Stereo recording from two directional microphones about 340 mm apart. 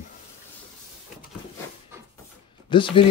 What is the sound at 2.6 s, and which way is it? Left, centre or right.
Speech, centre.